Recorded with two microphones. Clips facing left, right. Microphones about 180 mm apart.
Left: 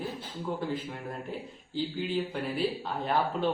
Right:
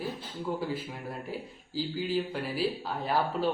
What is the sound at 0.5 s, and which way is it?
A man's voice, 5° right (ahead or behind).